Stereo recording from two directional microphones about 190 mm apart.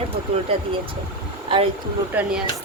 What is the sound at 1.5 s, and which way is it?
Speech, 25° right (ahead or behind).